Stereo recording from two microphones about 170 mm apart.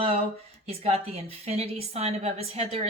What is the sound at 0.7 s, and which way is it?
A woman's voice, 35° right (ahead or behind).